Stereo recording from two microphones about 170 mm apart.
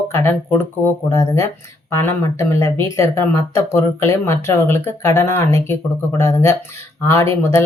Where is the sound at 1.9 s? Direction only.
15° left (ahead or behind).